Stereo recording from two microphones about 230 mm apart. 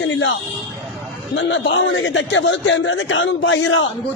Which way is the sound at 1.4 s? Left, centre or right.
Left.